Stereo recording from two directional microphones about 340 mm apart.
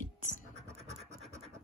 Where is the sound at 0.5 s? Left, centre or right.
Centre.